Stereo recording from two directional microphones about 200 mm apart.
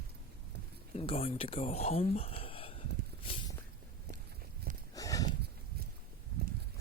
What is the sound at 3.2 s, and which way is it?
Walk, 25° left (ahead or behind).